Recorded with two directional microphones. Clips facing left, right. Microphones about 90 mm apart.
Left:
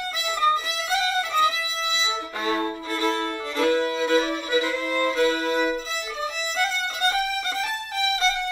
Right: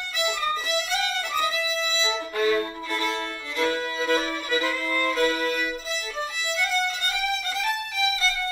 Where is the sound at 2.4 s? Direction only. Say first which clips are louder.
Right 2 dB; 30° left (ahead or behind).